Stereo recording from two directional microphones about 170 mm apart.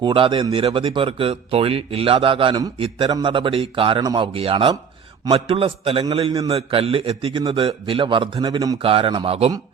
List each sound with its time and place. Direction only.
0.0 s speech: 25° right (ahead or behind)
8.8 s speech: 30° right (ahead or behind)